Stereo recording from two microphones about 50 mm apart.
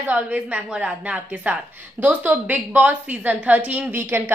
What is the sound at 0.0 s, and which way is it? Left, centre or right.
A woman's voice, right.